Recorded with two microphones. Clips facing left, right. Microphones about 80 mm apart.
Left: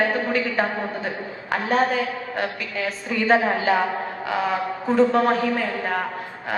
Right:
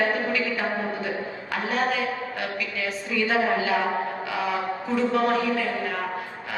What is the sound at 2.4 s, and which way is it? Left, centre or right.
A woman's voice, left.